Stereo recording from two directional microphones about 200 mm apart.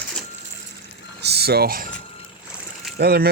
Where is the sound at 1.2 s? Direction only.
55° right (ahead or behind).